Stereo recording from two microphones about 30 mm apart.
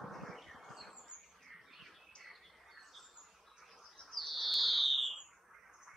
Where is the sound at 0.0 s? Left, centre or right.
Centre.